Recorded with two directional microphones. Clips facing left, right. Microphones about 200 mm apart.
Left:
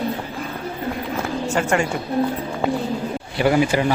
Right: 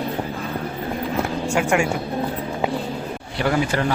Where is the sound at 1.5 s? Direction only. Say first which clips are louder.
Even; 10° right (ahead or behind).